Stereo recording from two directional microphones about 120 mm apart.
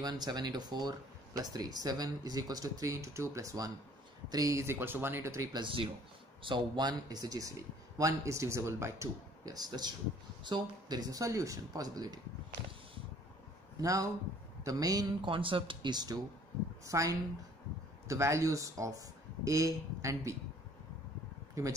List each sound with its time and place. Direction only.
0.0 s a man's voice: 35° right (ahead or behind)
5.6 s a man's voice: 50° right (ahead or behind); by 12.2 s 30° right (ahead or behind)
13.7 s a man's voice: 30° right (ahead or behind)
15.2 s a man's voice: 45° right (ahead or behind); by 20.3 s 25° right (ahead or behind)